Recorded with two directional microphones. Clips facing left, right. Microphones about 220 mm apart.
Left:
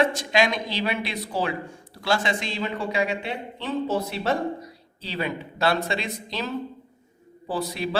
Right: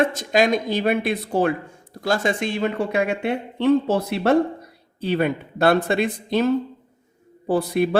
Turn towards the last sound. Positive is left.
turn(degrees=-55)  # may be behind; listen again after turning